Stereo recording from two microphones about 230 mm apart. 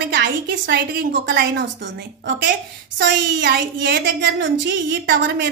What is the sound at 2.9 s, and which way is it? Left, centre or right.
A woman's voice, right.